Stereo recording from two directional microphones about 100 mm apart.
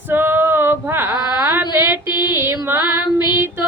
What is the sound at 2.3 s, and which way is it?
Female singing, 25° right (ahead or behind).